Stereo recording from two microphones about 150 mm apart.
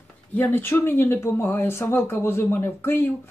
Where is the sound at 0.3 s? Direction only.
10° left (ahead or behind).